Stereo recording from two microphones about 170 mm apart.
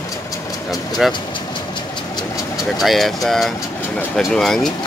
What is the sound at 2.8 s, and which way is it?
Speech, centre (ahead or behind).